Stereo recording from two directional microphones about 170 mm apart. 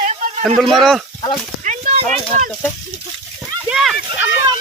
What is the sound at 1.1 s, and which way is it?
Speech, 25° left (ahead or behind).